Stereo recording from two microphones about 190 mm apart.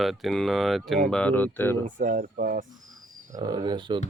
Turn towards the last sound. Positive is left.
turn(degrees=-25)  # may be behind; listen again after turning